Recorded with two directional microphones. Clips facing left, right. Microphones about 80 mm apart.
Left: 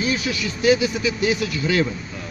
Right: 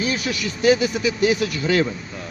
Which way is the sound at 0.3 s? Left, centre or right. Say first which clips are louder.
Right 1 dB; right.